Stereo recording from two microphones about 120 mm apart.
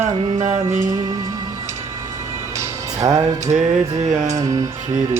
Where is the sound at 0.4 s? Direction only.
25° right (ahead or behind).